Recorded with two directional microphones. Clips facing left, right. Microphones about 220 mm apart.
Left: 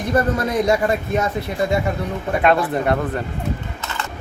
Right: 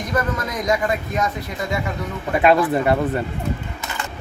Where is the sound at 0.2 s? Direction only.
30° left (ahead or behind).